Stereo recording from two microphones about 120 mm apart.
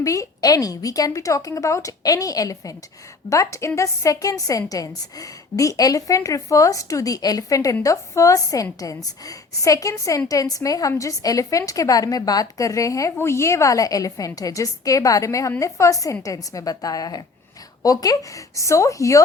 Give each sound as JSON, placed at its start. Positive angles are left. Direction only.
{"t": 0.0, "sound": "a woman's voice", "side_deg": 25}